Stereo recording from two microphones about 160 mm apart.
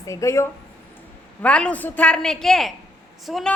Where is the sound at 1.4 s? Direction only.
5° left (ahead or behind).